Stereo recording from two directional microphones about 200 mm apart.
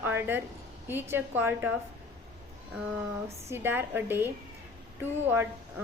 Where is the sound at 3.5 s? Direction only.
10° right (ahead or behind).